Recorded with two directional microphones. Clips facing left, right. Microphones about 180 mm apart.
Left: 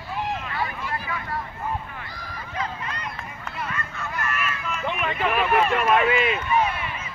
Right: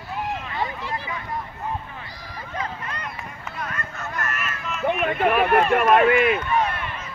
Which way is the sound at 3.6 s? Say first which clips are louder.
Even; 45° right (ahead or behind).